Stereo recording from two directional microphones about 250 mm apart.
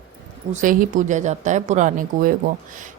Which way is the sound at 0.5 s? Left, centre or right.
Right.